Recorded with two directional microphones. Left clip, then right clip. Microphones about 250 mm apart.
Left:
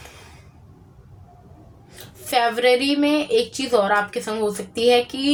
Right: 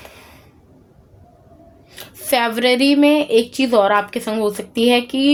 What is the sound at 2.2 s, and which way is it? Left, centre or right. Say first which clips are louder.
A woman's voice: right 2 dB; right.